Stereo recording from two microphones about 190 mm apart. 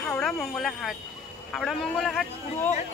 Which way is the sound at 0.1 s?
5° left (ahead or behind).